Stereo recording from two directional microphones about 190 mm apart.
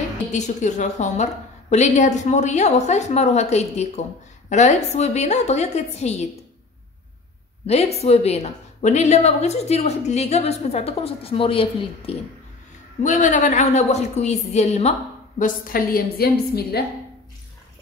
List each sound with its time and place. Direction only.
0.3 s a woman's voice: 40° left (ahead or behind)
7.6 s a woman's voice: 35° left (ahead or behind)
13.0 s a woman's voice: 40° left (ahead or behind)